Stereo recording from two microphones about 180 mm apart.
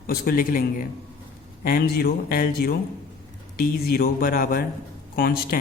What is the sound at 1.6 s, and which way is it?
Speech, 60° left (ahead or behind).